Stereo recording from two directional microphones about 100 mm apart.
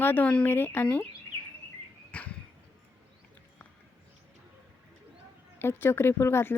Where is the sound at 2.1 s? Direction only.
15° left (ahead or behind).